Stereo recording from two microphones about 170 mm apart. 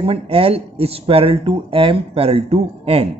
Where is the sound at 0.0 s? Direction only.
35° right (ahead or behind).